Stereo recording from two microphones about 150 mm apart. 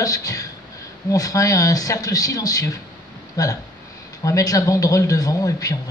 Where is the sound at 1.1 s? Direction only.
20° left (ahead or behind).